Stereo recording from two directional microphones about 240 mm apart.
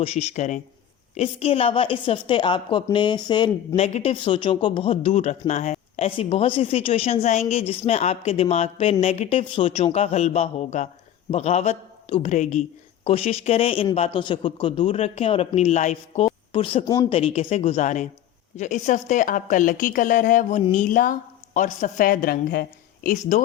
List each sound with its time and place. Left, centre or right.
0.0 s a woman's voice: left